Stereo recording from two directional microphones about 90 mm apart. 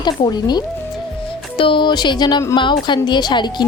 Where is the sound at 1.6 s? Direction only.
70° left (ahead or behind); by 3.5 s 55° left (ahead or behind).